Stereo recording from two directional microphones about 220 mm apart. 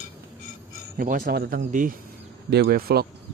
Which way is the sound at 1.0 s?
40° right (ahead or behind).